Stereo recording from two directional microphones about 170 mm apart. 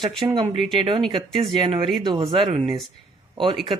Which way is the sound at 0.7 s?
30° right (ahead or behind).